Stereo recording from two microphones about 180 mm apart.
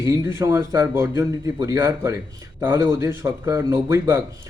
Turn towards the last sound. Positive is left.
turn(degrees=-15)  # may be behind; listen again after turning